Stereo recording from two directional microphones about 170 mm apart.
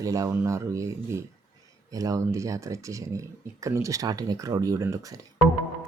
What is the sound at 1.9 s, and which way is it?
Speech, 20° right (ahead or behind).